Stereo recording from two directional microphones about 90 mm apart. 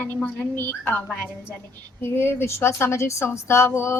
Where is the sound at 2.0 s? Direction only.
25° left (ahead or behind).